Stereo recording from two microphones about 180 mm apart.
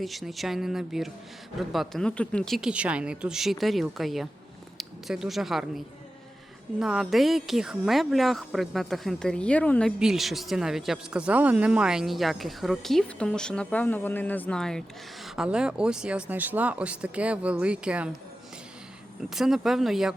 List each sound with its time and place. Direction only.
0.0 s speech: centre (ahead or behind)
19.3 s speech: centre (ahead or behind)